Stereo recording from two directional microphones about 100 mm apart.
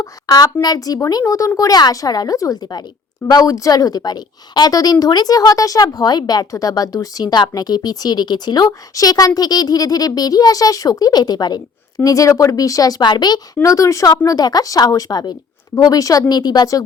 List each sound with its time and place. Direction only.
0.0 s a woman's voice: 40° left (ahead or behind)